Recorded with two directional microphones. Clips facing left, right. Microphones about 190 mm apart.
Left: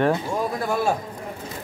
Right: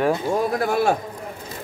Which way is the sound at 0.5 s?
70° right (ahead or behind).